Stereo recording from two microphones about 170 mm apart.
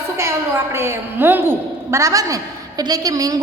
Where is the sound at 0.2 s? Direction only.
15° right (ahead or behind).